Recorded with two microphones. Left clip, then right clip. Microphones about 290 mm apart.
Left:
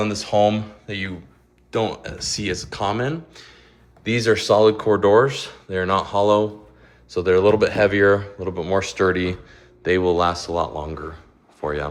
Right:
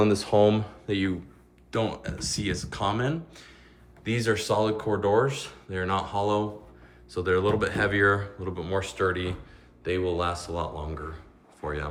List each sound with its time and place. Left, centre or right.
0.0 s speech: centre
1.7 s speech: centre